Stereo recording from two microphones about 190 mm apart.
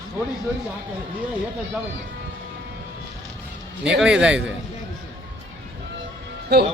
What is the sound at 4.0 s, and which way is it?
Speech, 5° right (ahead or behind).